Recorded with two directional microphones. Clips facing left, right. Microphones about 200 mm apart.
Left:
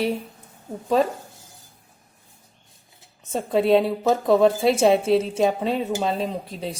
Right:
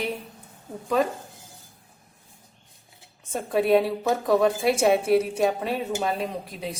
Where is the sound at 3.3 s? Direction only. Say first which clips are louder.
Left 2 dB; 25° left (ahead or behind).